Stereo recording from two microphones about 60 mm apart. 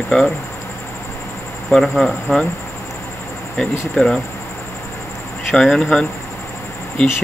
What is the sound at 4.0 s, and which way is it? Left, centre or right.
Speech, centre.